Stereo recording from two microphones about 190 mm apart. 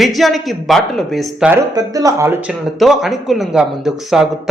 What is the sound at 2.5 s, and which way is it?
A man's voice, centre (ahead or behind).